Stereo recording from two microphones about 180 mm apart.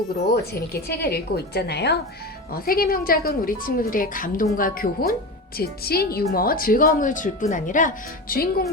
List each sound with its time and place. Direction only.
0.9 s a woman's voice: 60° left (ahead or behind)
2.5 s a woman's voice: 55° left (ahead or behind)